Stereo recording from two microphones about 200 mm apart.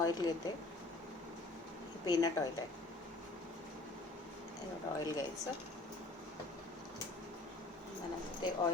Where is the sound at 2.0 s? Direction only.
20° left (ahead or behind).